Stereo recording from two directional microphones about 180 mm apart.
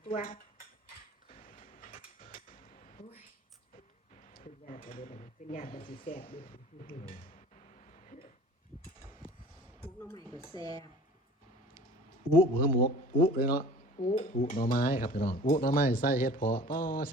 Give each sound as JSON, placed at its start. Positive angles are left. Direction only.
{"t": 0.2, "sound": "cutlery", "side_deg": 50}
{"t": 1.3, "sound": "a sound", "side_deg": 50}
{"t": 4.1, "sound": "speech", "side_deg": 45}
{"t": 6.1, "sound": "speech", "side_deg": 30}
{"t": 6.3, "sound": "cutlery", "side_deg": 50}
{"t": 7.2, "sound": "a sound", "side_deg": 40}
{"t": 9.8, "sound": "a sound", "side_deg": 10}
{"t": 10.3, "sound": "speech", "side_deg": 20}
{"t": 12.5, "sound": "cutlery", "side_deg": 55}